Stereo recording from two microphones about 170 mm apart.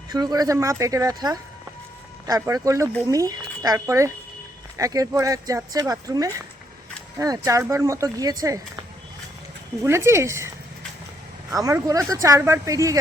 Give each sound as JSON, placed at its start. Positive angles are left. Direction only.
{"t": 0.1, "sound": "speech", "side_deg": -25}
{"t": 9.8, "sound": "speech", "side_deg": -15}
{"t": 11.5, "sound": "speech", "side_deg": -20}